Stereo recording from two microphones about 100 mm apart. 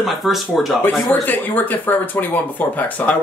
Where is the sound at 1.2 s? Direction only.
20° left (ahead or behind).